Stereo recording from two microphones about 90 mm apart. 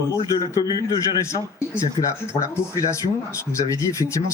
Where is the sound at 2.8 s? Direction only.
40° left (ahead or behind).